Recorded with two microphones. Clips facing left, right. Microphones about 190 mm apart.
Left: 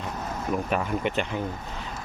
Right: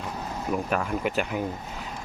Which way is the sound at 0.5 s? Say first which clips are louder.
Even; centre (ahead or behind).